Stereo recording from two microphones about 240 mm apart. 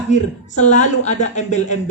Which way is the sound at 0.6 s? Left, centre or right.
Left.